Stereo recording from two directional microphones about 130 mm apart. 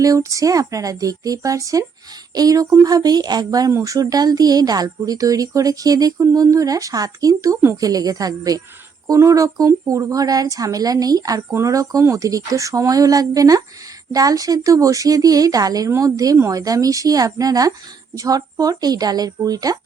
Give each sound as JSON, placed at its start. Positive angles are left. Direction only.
{"t": 0.0, "sound": "speech", "side_deg": -25}